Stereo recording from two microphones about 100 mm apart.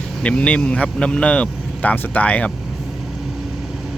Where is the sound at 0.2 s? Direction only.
10° left (ahead or behind).